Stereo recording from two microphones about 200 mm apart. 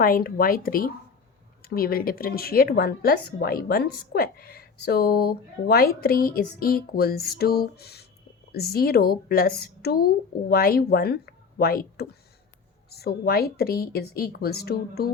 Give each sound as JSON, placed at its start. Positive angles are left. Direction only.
{"t": 0.0, "sound": "a woman's voice", "side_deg": 45}